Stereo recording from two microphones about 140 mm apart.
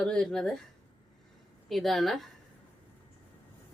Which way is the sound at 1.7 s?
Centre (ahead or behind).